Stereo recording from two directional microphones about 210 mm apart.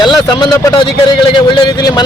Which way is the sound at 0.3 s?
20° left (ahead or behind).